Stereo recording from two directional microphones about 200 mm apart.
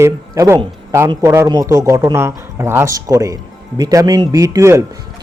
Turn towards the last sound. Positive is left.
turn(degrees=-15)  # may be behind; listen again after turning